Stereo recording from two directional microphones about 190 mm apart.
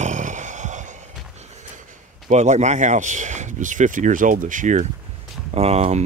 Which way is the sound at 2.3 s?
40° right (ahead or behind).